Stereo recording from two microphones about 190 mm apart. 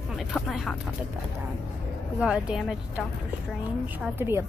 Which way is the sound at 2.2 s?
5° right (ahead or behind).